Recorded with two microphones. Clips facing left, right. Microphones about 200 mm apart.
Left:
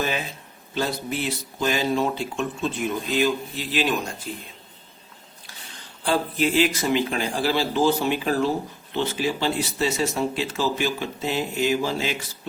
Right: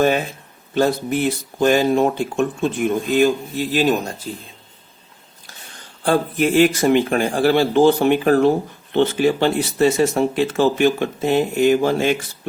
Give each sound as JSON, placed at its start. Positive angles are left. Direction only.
{"t": 0.0, "sound": "speech", "side_deg": -50}
{"t": 6.1, "sound": "speech", "side_deg": -55}